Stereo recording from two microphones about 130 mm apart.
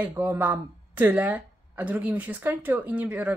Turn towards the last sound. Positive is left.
turn(degrees=-10)  # may be behind; listen again after turning